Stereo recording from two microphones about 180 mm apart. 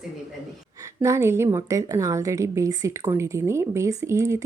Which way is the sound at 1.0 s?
15° right (ahead or behind).